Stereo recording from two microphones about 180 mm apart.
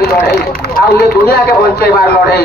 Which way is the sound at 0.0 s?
55° left (ahead or behind).